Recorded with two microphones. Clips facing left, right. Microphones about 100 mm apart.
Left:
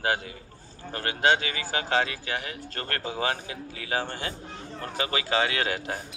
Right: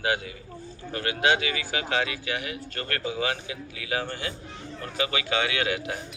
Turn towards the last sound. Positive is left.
turn(degrees=35)  # may be behind; listen again after turning